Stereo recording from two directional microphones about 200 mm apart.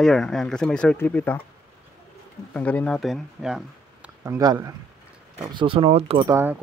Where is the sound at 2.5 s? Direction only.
5° left (ahead or behind).